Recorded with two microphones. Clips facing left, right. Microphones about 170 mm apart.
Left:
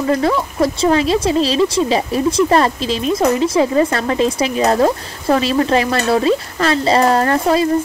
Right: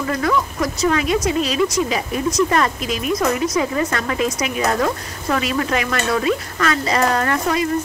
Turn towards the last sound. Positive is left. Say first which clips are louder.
# left 5 dB
turn(degrees=30)  # may be behind; listen again after turning